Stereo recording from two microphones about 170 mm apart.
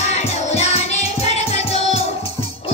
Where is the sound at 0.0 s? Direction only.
40° left (ahead or behind).